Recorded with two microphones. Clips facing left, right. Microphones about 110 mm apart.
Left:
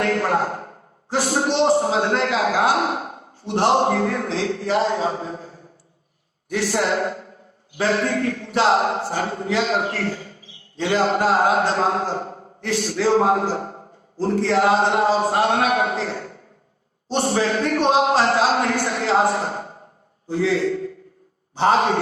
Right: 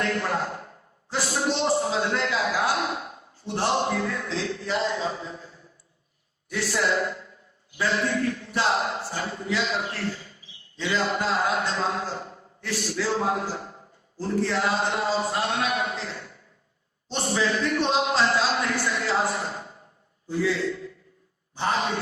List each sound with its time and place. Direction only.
0.0 s a man's voice: 50° left (ahead or behind)
3.4 s a man's voice: 65° left (ahead or behind)
3.7 s a man's voice: 50° left (ahead or behind)